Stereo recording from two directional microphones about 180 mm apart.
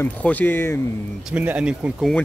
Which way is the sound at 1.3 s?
5° right (ahead or behind).